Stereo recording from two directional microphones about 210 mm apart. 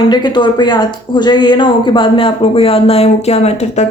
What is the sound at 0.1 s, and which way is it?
Speech, 20° left (ahead or behind).